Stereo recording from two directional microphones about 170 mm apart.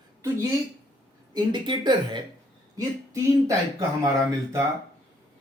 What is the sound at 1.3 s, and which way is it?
Speech, 25° right (ahead or behind).